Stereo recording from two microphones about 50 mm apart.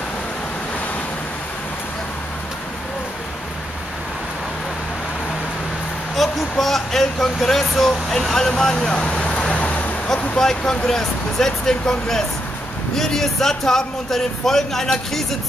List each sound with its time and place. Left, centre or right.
6.2 s vehicle: centre
6.6 s speech: centre
8.9 s vehicle: centre
10.3 s speech: centre